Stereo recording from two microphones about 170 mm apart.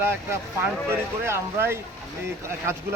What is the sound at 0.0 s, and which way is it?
Speech, 15° right (ahead or behind).